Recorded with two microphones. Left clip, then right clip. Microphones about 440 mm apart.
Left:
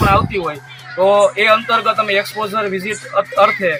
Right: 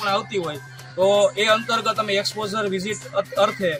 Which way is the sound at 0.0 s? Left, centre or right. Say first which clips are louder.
Left 8 dB; right.